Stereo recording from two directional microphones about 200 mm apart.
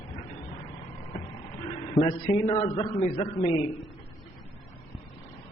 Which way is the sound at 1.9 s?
25° left (ahead or behind).